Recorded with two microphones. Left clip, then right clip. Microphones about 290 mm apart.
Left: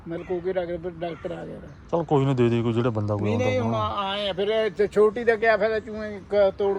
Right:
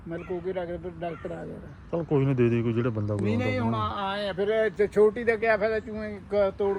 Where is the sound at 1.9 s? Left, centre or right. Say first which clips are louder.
Left 4 dB; centre; by 6.7 s left.